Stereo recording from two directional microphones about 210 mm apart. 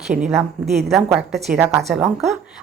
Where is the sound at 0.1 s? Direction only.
Centre (ahead or behind).